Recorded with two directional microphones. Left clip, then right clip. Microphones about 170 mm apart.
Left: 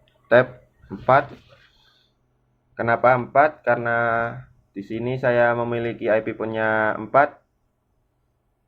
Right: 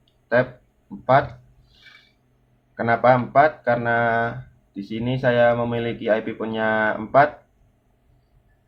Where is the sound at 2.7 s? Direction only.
40° left (ahead or behind).